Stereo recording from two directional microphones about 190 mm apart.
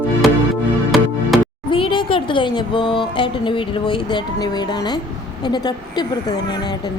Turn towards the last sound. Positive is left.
turn(degrees=20)  # may be behind; listen again after turning